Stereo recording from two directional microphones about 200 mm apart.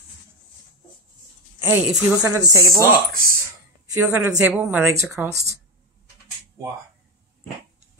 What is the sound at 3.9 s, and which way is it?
A woman's voice, 10° right (ahead or behind).